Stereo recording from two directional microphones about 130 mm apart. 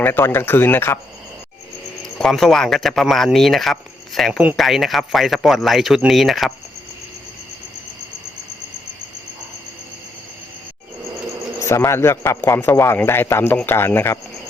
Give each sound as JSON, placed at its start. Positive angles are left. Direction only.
{"t": 0.0, "sound": "speech", "side_deg": 15}
{"t": 2.1, "sound": "speech", "side_deg": 5}
{"t": 11.6, "sound": "a man's voice", "side_deg": 20}